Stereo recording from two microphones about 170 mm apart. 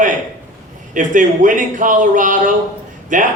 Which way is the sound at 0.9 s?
50° right (ahead or behind).